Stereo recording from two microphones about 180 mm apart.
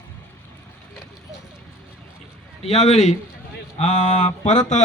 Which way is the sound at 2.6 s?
35° left (ahead or behind).